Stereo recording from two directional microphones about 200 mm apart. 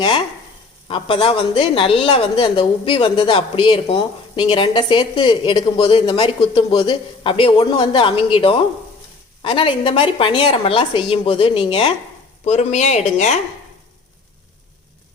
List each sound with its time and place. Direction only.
0.9 s a woman's voice: 25° left (ahead or behind)